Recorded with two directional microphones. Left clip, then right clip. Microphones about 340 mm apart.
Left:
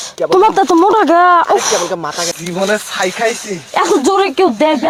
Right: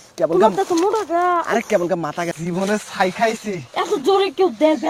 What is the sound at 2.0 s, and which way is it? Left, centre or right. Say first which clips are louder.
Speech: left 5 dB; right.